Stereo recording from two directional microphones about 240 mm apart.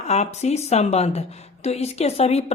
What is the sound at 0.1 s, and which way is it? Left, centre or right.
A woman's voice, left.